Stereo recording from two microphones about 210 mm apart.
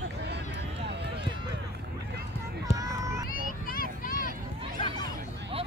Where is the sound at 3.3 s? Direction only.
45° left (ahead or behind).